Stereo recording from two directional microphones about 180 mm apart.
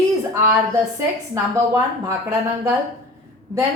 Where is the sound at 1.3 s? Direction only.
20° right (ahead or behind).